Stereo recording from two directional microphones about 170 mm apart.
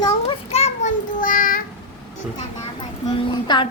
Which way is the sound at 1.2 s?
55° left (ahead or behind).